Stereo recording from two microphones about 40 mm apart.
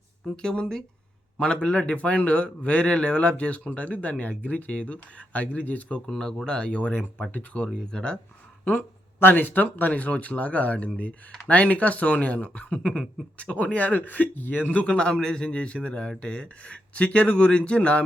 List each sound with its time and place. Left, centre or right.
0.4 s speech: centre
2.0 s speech: left
6.1 s speech: centre; by 7.7 s left
7.7 s speech: centre
9.3 s speech: left
14.9 s speech: centre